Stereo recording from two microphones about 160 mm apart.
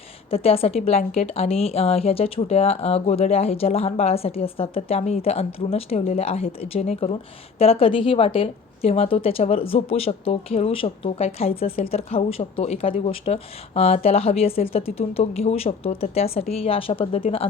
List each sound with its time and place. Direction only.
0.3 s a woman's voice: 35° left (ahead or behind)